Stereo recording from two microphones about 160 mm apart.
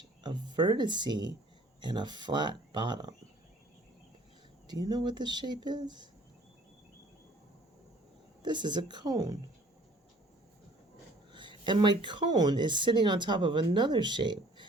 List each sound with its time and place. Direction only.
0.2 s speech: 25° right (ahead or behind)
4.7 s speech: 25° right (ahead or behind)
8.4 s speech: 30° right (ahead or behind)
11.3 s speech: 30° right (ahead or behind)